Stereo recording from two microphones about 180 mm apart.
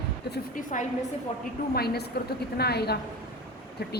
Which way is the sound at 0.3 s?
45° left (ahead or behind).